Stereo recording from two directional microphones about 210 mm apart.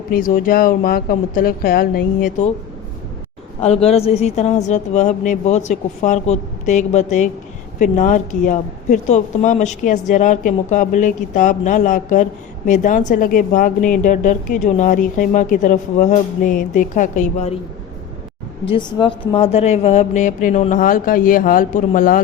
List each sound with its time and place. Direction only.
0.1 s speech: 40° left (ahead or behind)
3.6 s speech: 30° left (ahead or behind)
18.6 s speech: 25° left (ahead or behind); by 22.2 s 40° left (ahead or behind)